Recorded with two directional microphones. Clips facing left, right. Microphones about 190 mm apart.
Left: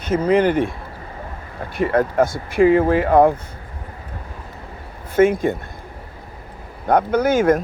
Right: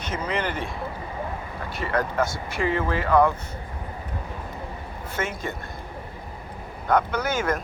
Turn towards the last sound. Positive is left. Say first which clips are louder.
# left 10 dB
turn(degrees=50)  # may be behind; listen again after turning